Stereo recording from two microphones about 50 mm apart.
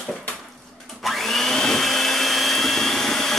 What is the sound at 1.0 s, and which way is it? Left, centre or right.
Vacuum cleaner, centre.